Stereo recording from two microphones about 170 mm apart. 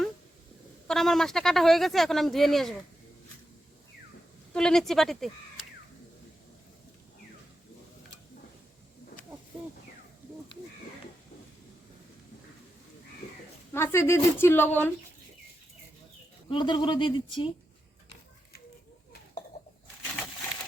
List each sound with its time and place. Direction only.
0.9 s speech: centre (ahead or behind)
4.5 s speech: 5° left (ahead or behind)
13.7 s a woman's voice: 15° left (ahead or behind)
16.5 s speech: 25° left (ahead or behind)